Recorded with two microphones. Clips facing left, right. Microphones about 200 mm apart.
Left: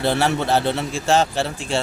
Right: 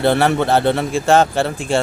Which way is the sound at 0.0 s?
55° right (ahead or behind).